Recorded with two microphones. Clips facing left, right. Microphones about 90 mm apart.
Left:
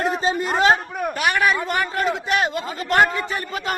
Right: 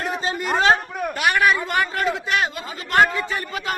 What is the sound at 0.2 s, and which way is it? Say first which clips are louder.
Chatter: left 2 dB; 30° left (ahead or behind).